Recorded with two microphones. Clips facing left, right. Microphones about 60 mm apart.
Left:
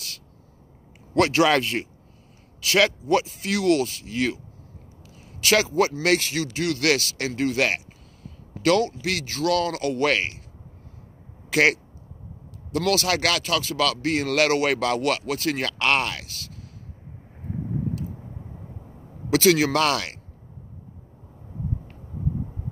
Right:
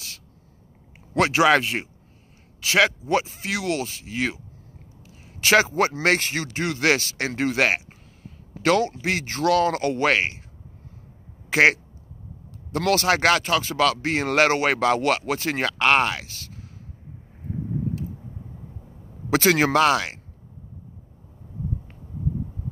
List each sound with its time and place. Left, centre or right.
1.1 s speech: centre
5.4 s a sound: right
5.7 s speech: right
11.5 s speech: right
19.3 s speech: right
19.7 s speech: centre